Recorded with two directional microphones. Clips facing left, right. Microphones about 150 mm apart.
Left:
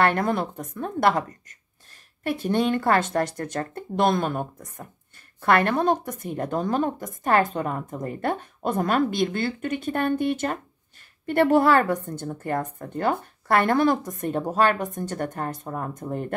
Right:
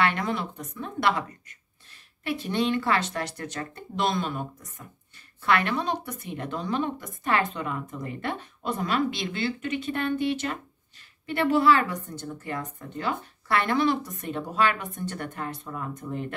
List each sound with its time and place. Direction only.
0.0 s a woman's voice: 50° left (ahead or behind)